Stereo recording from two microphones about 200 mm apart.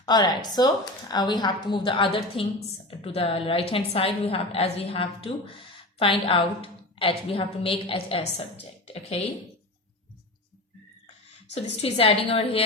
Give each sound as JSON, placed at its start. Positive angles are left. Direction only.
{"t": 0.0, "sound": "a woman's voice", "side_deg": 20}
{"t": 11.5, "sound": "a woman's voice", "side_deg": 30}